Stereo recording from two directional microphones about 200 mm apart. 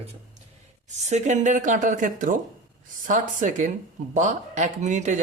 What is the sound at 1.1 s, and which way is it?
Speech, 35° right (ahead or behind).